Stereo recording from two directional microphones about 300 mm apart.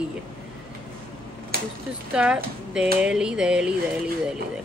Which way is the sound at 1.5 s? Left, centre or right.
Right.